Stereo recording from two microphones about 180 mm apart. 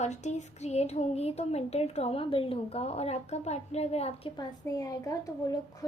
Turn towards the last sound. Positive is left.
turn(degrees=20)  # may be behind; listen again after turning